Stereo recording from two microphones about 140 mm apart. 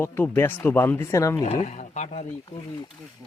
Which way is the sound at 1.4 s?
55° left (ahead or behind).